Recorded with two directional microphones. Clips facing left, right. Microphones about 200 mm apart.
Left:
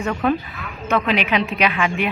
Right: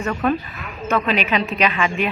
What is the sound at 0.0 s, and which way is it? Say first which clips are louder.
A woman's voice: even; 5° left (ahead or behind).